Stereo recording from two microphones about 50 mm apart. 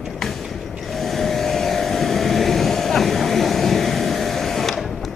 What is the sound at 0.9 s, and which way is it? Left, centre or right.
Vehicle, centre.